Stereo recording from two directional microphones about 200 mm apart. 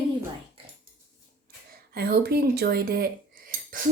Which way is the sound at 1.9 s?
50° right (ahead or behind).